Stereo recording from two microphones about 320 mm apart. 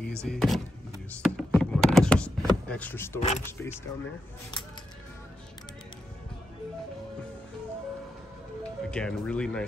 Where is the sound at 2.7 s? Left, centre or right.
Centre.